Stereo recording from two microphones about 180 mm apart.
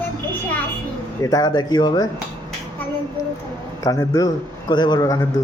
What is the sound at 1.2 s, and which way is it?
Speech, 20° left (ahead or behind).